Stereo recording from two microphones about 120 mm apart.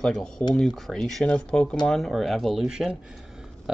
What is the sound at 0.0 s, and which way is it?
Speech, 5° left (ahead or behind).